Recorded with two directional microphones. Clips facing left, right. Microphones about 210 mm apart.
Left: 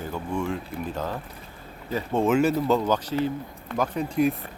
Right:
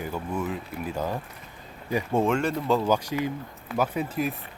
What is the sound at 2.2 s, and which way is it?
Speech, 5° left (ahead or behind).